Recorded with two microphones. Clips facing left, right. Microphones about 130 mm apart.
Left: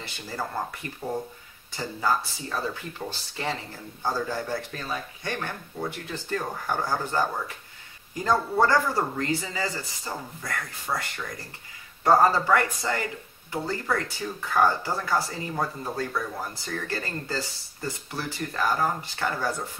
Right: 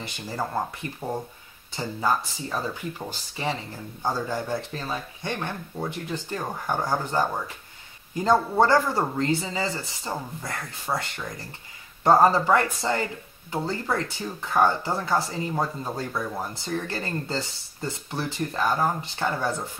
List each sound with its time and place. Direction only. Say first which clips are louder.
1.0 s speech: left 1 dB; 25° right (ahead or behind)